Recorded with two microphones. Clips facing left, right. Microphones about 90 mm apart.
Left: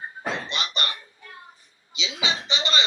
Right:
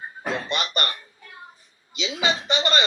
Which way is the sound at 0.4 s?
50° right (ahead or behind).